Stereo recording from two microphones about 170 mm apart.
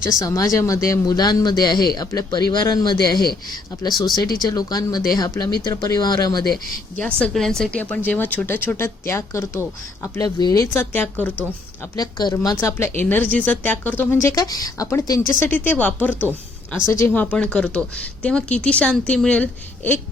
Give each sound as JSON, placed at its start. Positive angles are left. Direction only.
{"t": 0.1, "sound": "speech", "side_deg": 20}
{"t": 4.4, "sound": "speech", "side_deg": 20}
{"t": 6.9, "sound": "speech", "side_deg": 5}
{"t": 11.8, "sound": "speech", "side_deg": 25}
{"t": 17.3, "sound": "speech", "side_deg": 5}